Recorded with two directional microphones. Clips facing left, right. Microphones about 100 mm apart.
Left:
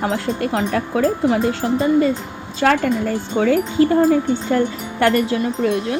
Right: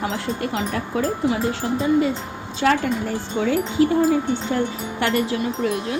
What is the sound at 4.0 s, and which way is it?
Wind chime, 45° left (ahead or behind).